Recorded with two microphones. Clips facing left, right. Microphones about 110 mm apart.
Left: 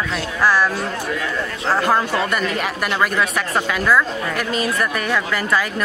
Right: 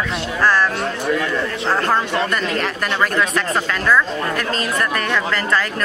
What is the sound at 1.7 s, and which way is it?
Speech, 10° left (ahead or behind).